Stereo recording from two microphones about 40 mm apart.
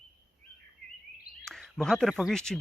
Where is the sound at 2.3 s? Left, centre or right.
Centre.